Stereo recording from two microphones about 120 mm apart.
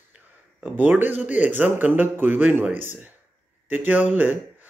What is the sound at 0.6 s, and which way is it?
A man's voice, 15° right (ahead or behind).